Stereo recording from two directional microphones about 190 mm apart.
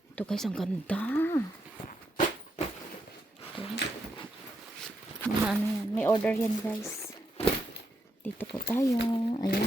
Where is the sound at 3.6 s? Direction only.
30° left (ahead or behind).